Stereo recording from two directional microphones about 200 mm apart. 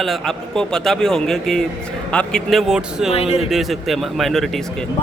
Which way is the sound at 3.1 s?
30° left (ahead or behind).